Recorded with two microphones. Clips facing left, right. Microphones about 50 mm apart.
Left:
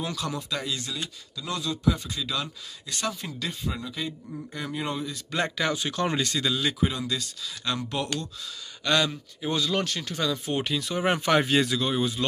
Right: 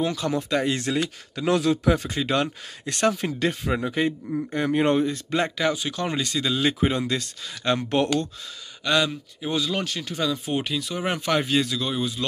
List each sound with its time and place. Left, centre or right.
0.0 s speech: right
0.4 s speech: right
0.7 s speech: right
5.3 s speech: centre
5.7 s speech: centre
6.6 s speech: right
8.8 s speech: centre
10.7 s speech: centre